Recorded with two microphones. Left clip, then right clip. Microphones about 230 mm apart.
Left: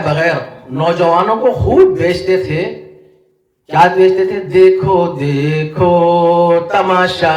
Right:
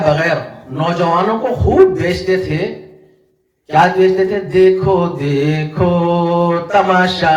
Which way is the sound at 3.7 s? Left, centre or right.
Left.